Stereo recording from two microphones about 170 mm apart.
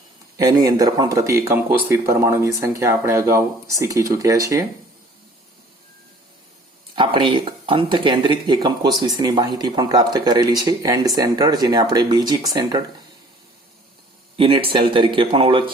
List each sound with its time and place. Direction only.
0.3 s speech: 20° right (ahead or behind)
6.9 s speech: 30° right (ahead or behind)
14.3 s speech: 30° right (ahead or behind)